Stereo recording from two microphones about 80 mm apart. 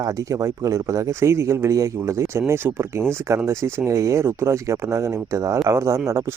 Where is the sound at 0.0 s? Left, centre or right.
Right.